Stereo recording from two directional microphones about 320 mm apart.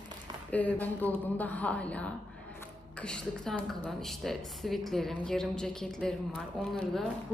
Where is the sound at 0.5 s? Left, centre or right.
Centre.